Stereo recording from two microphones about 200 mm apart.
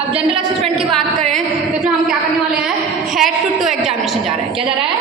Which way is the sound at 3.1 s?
Centre (ahead or behind).